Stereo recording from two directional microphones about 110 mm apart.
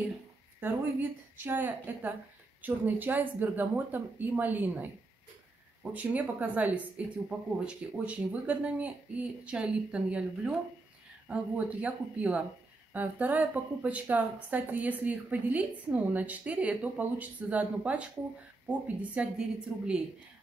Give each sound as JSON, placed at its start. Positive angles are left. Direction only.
{"t": 0.6, "sound": "a woman's voice", "side_deg": -15}